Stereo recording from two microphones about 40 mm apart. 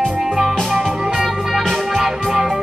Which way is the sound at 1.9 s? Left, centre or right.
Centre.